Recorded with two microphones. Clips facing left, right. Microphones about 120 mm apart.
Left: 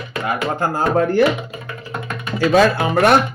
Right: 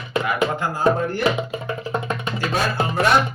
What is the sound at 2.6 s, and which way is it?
Speech, 70° left (ahead or behind).